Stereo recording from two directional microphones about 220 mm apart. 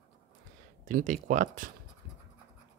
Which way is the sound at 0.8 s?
35° right (ahead or behind).